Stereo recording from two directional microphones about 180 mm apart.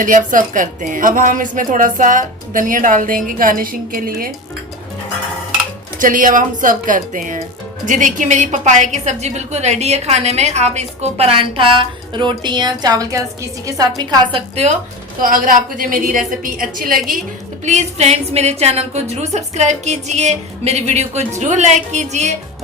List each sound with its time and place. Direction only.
0.0 s speech: 45° right (ahead or behind)
6.0 s a woman's voice: 50° right (ahead or behind); by 14.2 s 20° right (ahead or behind)
14.3 s a woman's voice: 35° right (ahead or behind)
15.2 s speech: 50° right (ahead or behind)
17.7 s a woman's voice: 40° right (ahead or behind)